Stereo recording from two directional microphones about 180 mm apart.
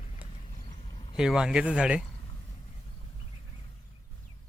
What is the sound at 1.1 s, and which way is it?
Speech, 5° right (ahead or behind).